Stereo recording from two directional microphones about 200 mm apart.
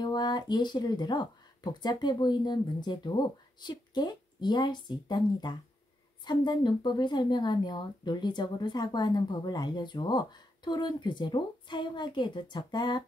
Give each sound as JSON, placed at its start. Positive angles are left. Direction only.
{"t": 0.0, "sound": "speech", "side_deg": 20}